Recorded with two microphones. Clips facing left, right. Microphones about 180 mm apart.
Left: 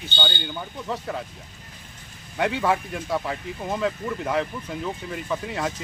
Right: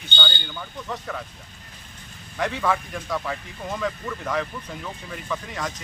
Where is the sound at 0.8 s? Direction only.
30° left (ahead or behind).